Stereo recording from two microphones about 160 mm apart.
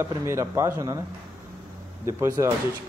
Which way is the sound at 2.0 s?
20° right (ahead or behind).